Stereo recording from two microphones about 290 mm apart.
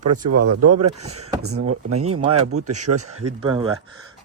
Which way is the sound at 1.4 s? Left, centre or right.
Right.